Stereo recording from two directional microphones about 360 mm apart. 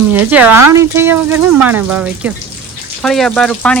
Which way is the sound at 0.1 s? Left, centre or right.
Centre.